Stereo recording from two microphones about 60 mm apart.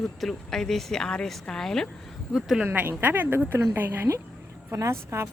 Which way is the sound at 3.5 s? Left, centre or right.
Right.